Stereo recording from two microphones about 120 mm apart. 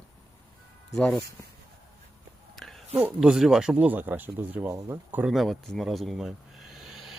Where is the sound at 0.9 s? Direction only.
5° left (ahead or behind).